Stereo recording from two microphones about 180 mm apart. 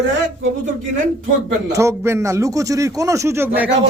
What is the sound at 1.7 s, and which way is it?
A man's voice, 15° right (ahead or behind).